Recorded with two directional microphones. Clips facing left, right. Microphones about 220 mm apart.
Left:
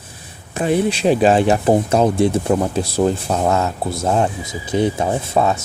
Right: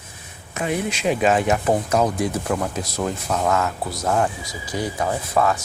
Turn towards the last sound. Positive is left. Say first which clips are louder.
# left 3 dB
turn(degrees=25)  # may be behind; listen again after turning